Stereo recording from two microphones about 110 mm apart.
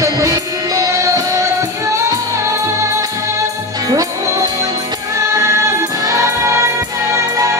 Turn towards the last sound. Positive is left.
turn(degrees=-30)  # may be behind; listen again after turning